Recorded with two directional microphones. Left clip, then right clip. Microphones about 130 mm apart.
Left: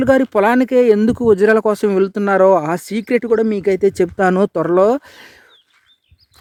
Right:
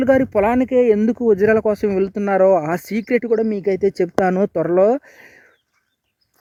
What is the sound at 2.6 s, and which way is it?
Speech, 20° left (ahead or behind).